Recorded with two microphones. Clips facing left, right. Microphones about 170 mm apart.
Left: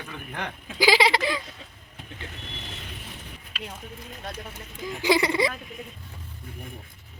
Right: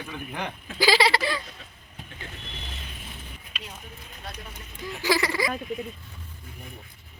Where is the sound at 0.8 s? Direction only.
15° left (ahead or behind).